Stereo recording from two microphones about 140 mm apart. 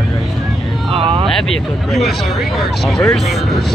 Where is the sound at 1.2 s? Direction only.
Centre (ahead or behind).